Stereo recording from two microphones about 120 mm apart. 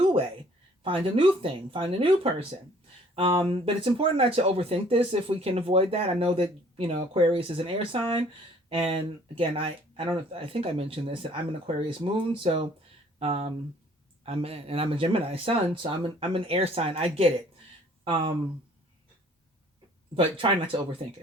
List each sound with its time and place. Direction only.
0.0 s a sound: 50° right (ahead or behind)
0.8 s speech: 45° right (ahead or behind)
18.0 s speech: 45° right (ahead or behind)
20.1 s speech: 45° right (ahead or behind)